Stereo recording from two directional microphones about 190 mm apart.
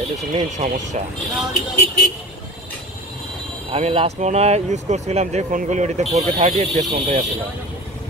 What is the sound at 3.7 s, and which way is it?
Speech, 30° right (ahead or behind).